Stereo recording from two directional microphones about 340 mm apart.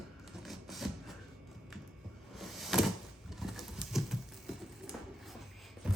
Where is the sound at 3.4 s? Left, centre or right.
Centre.